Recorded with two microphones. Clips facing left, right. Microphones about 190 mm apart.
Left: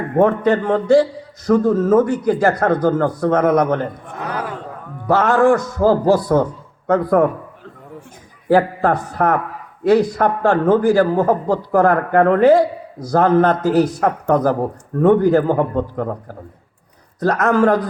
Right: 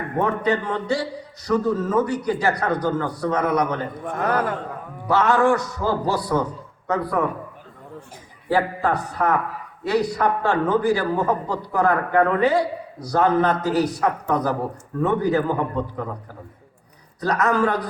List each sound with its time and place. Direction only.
0.2 s a man's voice: 50° left (ahead or behind)
4.0 s a man's voice: 50° right (ahead or behind)
5.0 s a man's voice: 50° left (ahead or behind)
8.4 s a man's voice: 45° left (ahead or behind)
17.2 s a man's voice: 50° left (ahead or behind)